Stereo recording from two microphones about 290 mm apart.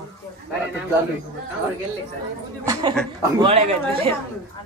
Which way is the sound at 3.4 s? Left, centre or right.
Centre.